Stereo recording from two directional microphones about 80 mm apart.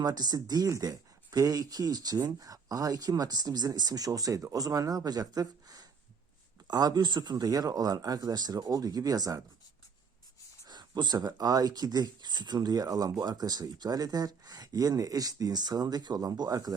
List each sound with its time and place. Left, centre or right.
0.0 s speech: right
10.7 s speech: right